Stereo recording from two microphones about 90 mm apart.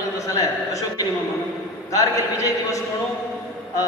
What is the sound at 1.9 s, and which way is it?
Speech, 40° left (ahead or behind).